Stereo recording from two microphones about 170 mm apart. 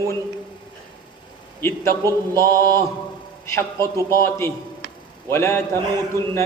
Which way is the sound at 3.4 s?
15° left (ahead or behind).